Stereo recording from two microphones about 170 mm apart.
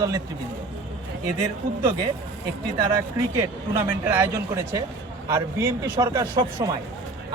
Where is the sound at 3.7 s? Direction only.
15° right (ahead or behind).